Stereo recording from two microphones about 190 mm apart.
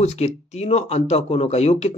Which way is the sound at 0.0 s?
35° left (ahead or behind).